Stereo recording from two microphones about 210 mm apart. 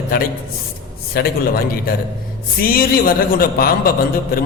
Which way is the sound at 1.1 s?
50° left (ahead or behind).